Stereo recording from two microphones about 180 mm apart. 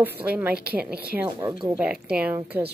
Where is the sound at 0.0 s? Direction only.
10° right (ahead or behind).